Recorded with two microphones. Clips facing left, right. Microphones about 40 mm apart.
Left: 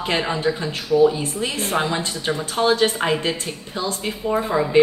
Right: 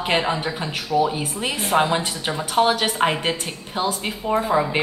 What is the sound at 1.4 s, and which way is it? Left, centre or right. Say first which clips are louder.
A woman's voice: right 5 dB; centre.